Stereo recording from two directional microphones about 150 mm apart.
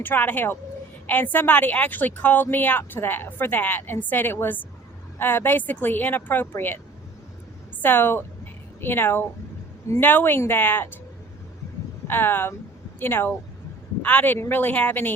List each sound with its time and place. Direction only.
0.0 s speech: 10° left (ahead or behind)
7.8 s a woman's voice: 15° left (ahead or behind)
12.0 s speech: 15° left (ahead or behind)